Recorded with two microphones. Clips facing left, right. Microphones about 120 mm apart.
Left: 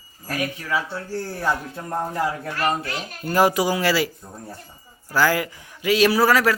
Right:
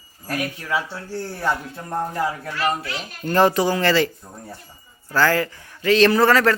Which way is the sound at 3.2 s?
10° left (ahead or behind).